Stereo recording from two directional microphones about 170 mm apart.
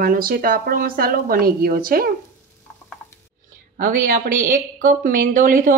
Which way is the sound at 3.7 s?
55° right (ahead or behind).